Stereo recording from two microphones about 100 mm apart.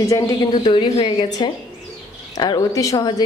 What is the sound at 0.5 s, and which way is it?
A woman's voice, 50° left (ahead or behind).